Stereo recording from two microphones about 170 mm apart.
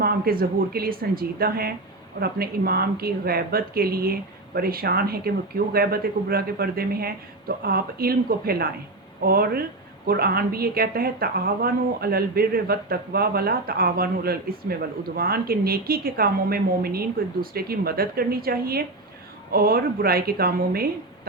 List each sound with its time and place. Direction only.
0.0 s a woman's voice: 60° right (ahead or behind)